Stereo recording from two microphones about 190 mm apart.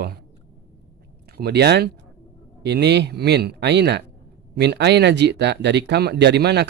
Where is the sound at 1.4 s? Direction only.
60° right (ahead or behind).